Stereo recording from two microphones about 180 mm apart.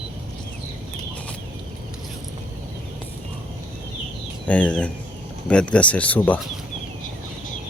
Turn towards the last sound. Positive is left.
turn(degrees=10)  # may be behind; listen again after turning